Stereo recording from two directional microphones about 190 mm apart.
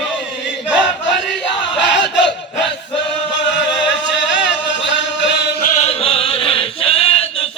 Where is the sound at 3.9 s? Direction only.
70° left (ahead or behind).